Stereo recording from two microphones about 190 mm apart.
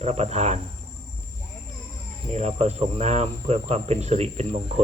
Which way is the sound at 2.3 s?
35° right (ahead or behind).